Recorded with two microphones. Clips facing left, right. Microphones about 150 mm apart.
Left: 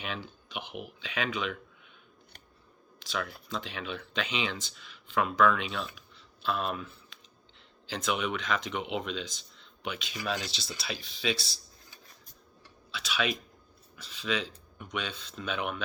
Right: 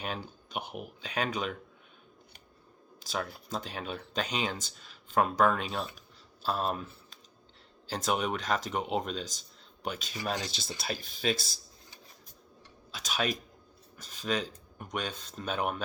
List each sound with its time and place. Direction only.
0.0 s speech: 40° right (ahead or behind)
3.0 s speech: 40° right (ahead or behind)
12.9 s typing: 45° right (ahead or behind)
13.9 s speech: 45° right (ahead or behind)